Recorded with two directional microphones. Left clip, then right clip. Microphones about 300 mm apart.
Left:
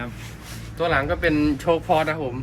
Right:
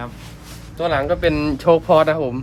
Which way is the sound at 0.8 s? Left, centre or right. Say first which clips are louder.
Right 3 dB; right.